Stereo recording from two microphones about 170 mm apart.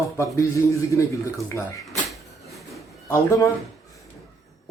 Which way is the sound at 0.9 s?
15° left (ahead or behind).